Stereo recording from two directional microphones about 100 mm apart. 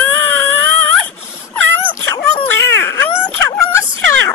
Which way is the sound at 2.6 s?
25° left (ahead or behind).